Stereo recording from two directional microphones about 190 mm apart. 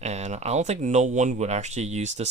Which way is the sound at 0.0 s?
35° right (ahead or behind).